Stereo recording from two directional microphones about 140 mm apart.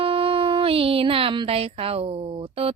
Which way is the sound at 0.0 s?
45° right (ahead or behind).